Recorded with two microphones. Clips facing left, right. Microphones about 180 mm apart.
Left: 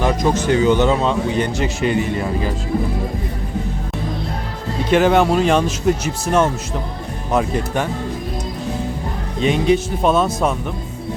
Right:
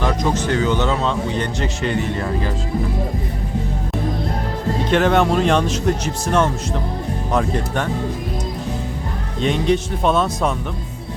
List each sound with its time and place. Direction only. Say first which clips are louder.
0.0 s speech: left 2 dB; 10° left (ahead or behind)
4.9 s speech: left 3 dB; 5° left (ahead or behind)
9.4 s speech: left 2 dB; 5° left (ahead or behind)